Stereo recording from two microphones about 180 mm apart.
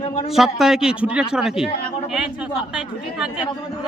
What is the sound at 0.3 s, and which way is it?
Speech, centre (ahead or behind).